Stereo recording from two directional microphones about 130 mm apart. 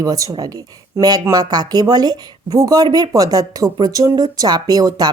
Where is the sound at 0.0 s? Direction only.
30° right (ahead or behind).